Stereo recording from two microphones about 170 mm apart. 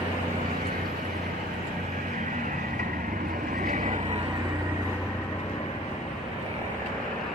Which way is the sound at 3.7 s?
50° right (ahead or behind).